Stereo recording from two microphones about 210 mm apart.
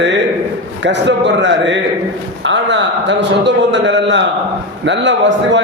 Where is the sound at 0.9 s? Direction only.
55° right (ahead or behind).